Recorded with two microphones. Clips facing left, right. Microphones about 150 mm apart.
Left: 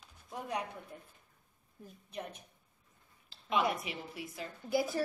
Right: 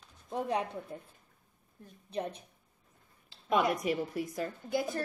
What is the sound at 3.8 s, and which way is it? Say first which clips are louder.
Speech: right 11 dB; 45° right (ahead or behind).